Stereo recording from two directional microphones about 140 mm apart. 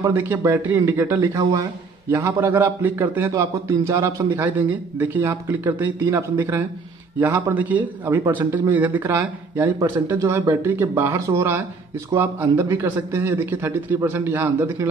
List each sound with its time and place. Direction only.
0.0 s a man's voice: 20° right (ahead or behind)
1.4 s a man's voice: 25° right (ahead or behind)